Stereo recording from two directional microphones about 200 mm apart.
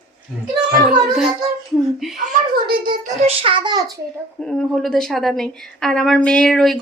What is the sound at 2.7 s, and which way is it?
Speech, 45° right (ahead or behind).